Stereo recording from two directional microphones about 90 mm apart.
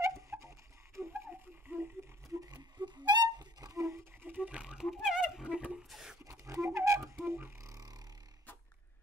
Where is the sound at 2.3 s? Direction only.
45° right (ahead or behind).